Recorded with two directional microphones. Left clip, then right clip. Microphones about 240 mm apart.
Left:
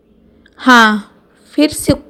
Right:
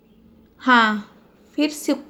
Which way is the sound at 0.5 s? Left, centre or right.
Left.